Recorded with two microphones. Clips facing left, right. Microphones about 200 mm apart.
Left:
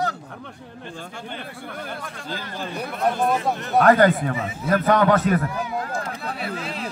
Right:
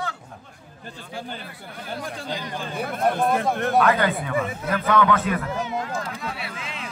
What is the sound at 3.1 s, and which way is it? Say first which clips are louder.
Speech: even; 55° right (ahead or behind).